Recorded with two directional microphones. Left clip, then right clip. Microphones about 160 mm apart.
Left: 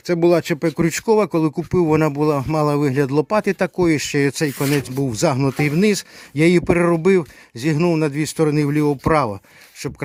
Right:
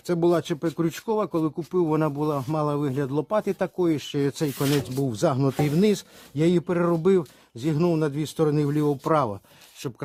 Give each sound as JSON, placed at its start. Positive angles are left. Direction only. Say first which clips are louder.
{"t": 0.1, "sound": "speech", "louder": "left 6 dB", "side_deg": 25}